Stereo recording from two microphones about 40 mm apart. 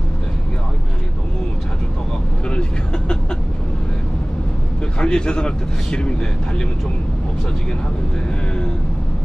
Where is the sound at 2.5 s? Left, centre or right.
Left.